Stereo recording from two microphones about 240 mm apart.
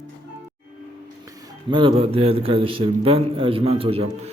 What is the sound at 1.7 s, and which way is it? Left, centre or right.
A man's voice, right.